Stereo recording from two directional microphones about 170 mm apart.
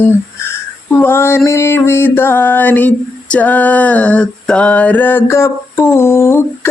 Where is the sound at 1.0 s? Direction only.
15° left (ahead or behind).